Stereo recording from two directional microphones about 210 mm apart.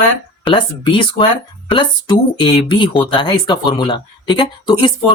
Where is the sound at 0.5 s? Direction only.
25° left (ahead or behind).